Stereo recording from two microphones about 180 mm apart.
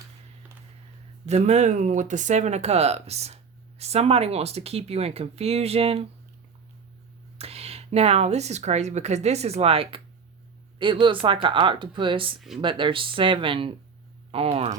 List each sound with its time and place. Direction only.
1.3 s speech: 40° right (ahead or behind)
7.3 s speech: 35° right (ahead or behind)